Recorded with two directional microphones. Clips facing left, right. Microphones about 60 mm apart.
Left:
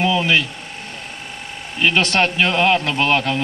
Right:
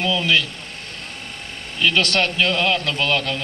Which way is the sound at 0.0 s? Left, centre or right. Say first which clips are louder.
Left 3 dB; left.